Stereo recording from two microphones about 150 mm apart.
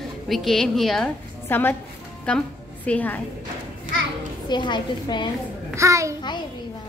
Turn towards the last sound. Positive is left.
turn(degrees=-20)  # may be behind; listen again after turning